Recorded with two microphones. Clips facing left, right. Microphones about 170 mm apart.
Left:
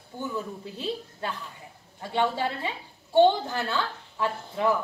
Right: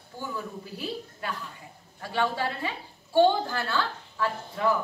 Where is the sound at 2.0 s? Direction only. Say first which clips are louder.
Left 2 dB; 20° left (ahead or behind).